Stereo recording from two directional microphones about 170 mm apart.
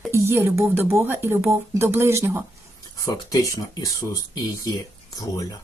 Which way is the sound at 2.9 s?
20° left (ahead or behind).